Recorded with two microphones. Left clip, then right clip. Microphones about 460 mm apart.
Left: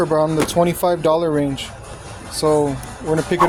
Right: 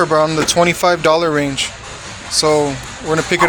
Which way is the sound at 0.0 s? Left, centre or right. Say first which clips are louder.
Right 4 dB; left.